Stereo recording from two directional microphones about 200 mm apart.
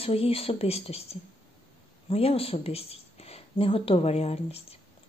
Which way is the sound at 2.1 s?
30° left (ahead or behind).